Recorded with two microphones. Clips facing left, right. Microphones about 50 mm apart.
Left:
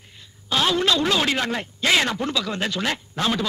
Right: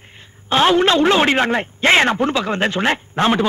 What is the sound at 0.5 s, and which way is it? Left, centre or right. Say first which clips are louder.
A man's voice: right 7 dB; right.